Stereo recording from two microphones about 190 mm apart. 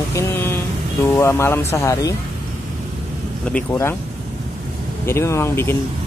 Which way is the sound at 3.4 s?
10° left (ahead or behind).